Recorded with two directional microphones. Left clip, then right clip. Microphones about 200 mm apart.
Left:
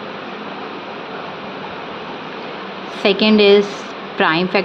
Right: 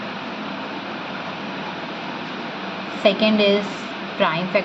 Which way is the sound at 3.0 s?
50° left (ahead or behind).